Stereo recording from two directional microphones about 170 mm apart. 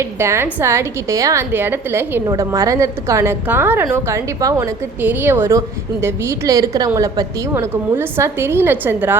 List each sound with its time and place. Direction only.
0.0 s a woman's voice: 15° right (ahead or behind)